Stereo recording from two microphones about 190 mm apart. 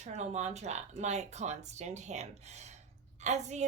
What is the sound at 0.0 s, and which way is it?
A woman's voice, 35° right (ahead or behind).